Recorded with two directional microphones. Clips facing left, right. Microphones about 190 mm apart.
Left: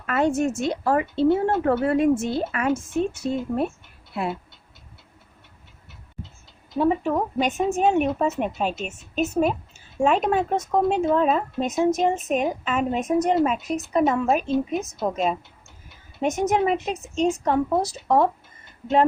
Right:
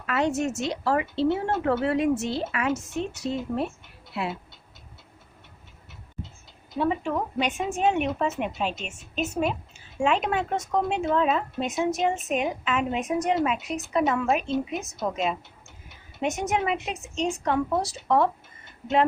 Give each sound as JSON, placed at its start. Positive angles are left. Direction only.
{"t": 0.0, "sound": "a woman's voice", "side_deg": 50}
{"t": 6.7, "sound": "a woman's voice", "side_deg": 40}